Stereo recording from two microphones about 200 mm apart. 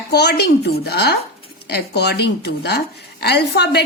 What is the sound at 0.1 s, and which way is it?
A woman's voice, 55° left (ahead or behind).